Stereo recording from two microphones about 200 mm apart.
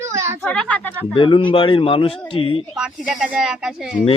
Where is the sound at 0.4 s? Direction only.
5° left (ahead or behind).